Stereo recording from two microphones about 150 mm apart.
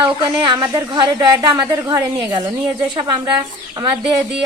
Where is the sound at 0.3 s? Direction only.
30° right (ahead or behind).